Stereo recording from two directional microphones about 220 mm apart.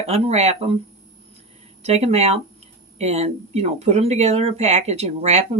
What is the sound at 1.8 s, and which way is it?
Speech, 30° right (ahead or behind).